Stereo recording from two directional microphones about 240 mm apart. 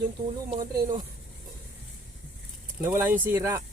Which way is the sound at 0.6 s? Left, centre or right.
Centre.